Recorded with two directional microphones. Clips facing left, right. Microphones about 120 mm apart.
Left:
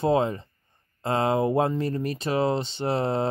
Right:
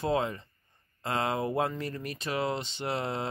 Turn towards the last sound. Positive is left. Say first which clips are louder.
# left 7 dB
turn(degrees=35)  # may be behind; listen again after turning